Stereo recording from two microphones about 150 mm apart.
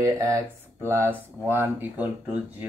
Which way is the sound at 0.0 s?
20° right (ahead or behind).